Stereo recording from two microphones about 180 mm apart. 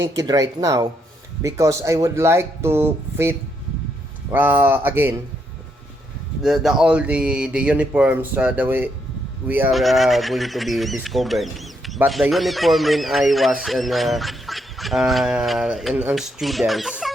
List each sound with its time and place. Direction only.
0.2 s speech: 20° right (ahead or behind)
6.4 s speech: centre (ahead or behind)